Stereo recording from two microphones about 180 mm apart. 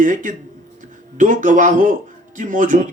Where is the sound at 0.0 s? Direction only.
45° right (ahead or behind).